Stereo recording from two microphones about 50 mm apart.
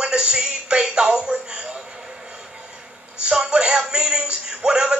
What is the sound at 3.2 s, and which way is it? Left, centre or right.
Speech, centre.